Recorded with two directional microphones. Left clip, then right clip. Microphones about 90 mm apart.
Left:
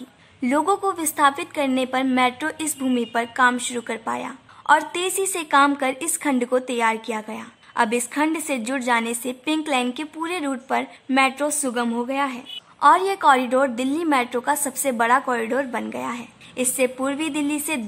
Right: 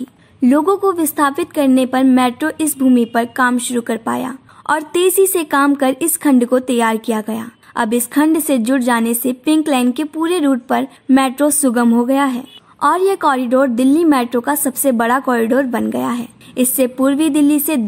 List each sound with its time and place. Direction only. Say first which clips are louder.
0.4 s a woman's voice: right 7 dB; 25° right (ahead or behind); by 12.4 s 55° right (ahead or behind)
12.8 s a woman's voice: right 2 dB; 35° right (ahead or behind)